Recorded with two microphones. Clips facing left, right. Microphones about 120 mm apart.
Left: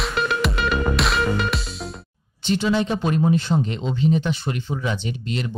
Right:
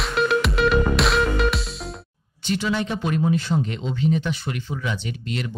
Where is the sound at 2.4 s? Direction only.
25° left (ahead or behind).